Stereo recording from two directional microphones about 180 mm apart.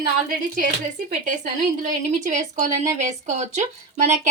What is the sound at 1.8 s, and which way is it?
Speech, 45° right (ahead or behind).